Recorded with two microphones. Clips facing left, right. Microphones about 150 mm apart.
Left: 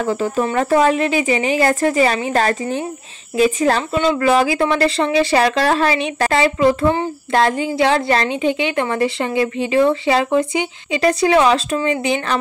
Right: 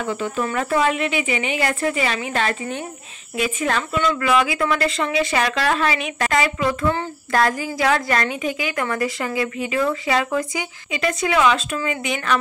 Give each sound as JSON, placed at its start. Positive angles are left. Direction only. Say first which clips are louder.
{"t": 0.0, "sound": "a woman's voice", "louder": "left 5 dB", "side_deg": 35}